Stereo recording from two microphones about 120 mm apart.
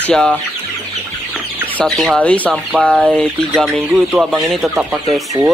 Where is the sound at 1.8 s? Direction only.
Centre (ahead or behind).